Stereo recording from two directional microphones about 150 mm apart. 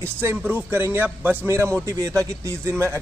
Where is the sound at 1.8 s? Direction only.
20° right (ahead or behind).